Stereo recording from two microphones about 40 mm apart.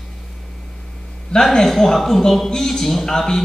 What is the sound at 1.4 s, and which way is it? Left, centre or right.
A man's voice, centre.